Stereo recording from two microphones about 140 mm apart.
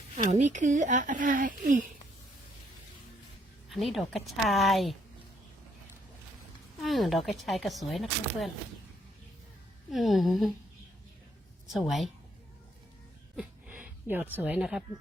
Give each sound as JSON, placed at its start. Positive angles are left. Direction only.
{"t": 0.3, "sound": "speech", "side_deg": -60}
{"t": 3.7, "sound": "speech", "side_deg": 0}
{"t": 6.8, "sound": "speech", "side_deg": 0}
{"t": 9.9, "sound": "speech", "side_deg": 0}
{"t": 13.3, "sound": "a sound", "side_deg": -10}